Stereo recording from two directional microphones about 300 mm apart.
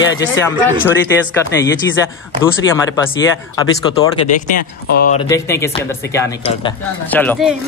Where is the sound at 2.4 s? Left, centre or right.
Centre.